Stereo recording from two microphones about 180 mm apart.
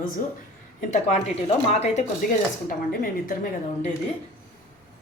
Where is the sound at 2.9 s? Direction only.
50° left (ahead or behind).